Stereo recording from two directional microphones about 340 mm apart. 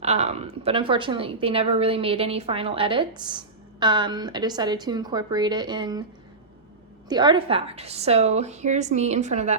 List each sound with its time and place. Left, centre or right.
0.0 s a woman's voice: centre
7.1 s a woman's voice: centre